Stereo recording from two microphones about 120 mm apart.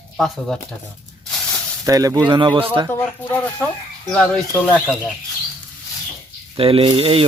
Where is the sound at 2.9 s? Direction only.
15° left (ahead or behind).